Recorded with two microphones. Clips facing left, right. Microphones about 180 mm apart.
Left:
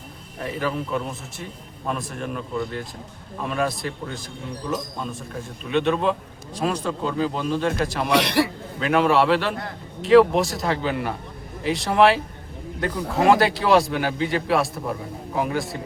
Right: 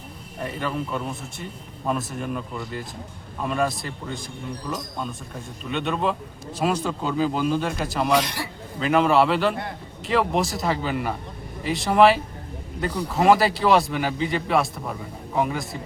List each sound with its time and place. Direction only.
0.4 s a man's voice: centre (ahead or behind)
5.6 s a man's voice: centre (ahead or behind)
8.1 s a man's voice: 70° left (ahead or behind)
8.8 s a man's voice: centre (ahead or behind)